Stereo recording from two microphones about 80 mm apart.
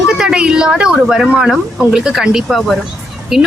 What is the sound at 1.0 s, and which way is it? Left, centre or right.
Speech, centre.